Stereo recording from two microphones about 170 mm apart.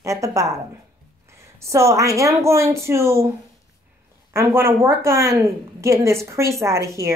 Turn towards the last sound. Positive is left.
turn(degrees=-15)  # may be behind; listen again after turning